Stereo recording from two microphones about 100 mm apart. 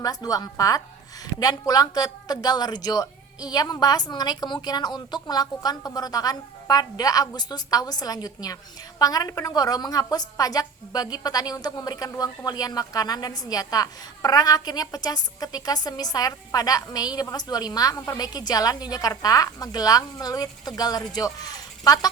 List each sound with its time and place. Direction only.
0.0 s a woman's voice: 40° left (ahead or behind)